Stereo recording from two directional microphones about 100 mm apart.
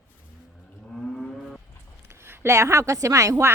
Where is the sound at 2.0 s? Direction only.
25° right (ahead or behind).